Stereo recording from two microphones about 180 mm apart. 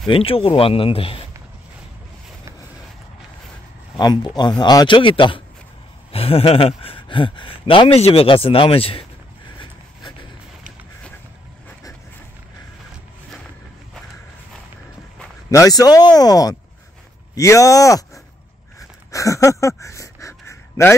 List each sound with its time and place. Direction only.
0.1 s speech: 30° left (ahead or behind)
3.9 s speech: 25° left (ahead or behind)
15.5 s speech: 20° left (ahead or behind)
18.8 s a sound: 15° left (ahead or behind)
19.8 s pant: 15° left (ahead or behind)